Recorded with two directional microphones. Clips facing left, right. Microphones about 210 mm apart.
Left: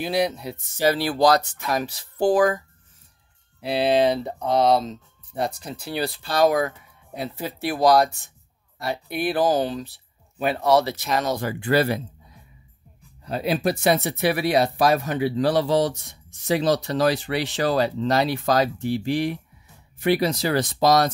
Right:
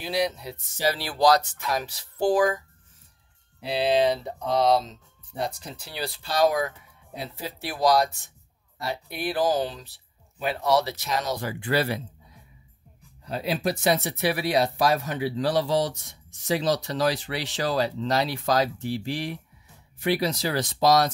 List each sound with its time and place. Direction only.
0.0 s speech: 55° left (ahead or behind)
3.6 s speech: 55° left (ahead or behind)
9.1 s speech: 55° left (ahead or behind)
13.2 s speech: 55° left (ahead or behind)